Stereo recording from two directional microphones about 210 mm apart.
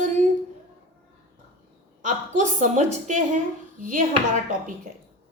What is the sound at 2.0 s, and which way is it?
A woman's voice, 35° right (ahead or behind).